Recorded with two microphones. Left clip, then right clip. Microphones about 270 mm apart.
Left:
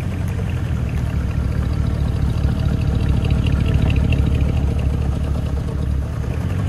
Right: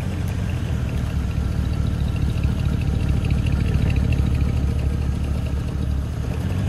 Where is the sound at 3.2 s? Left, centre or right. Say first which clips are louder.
Left 4 dB; left.